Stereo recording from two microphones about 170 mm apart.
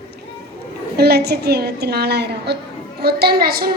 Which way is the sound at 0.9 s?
70° right (ahead or behind).